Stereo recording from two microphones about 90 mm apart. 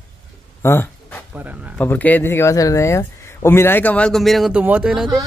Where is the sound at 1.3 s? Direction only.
20° right (ahead or behind).